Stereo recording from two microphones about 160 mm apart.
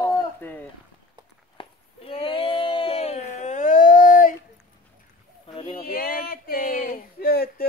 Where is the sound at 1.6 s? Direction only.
35° left (ahead or behind); by 4.4 s 60° left (ahead or behind).